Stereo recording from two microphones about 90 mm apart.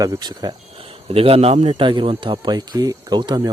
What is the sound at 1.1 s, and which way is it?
A man's voice, 90° right.